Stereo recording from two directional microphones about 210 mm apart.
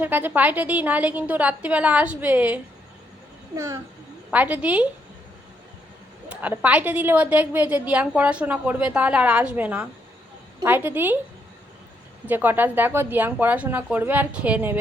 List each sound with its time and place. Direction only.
0.0 s a woman's voice: 10° right (ahead or behind)
6.2 s a woman's voice: 5° right (ahead or behind)
12.3 s a woman's voice: 10° right (ahead or behind)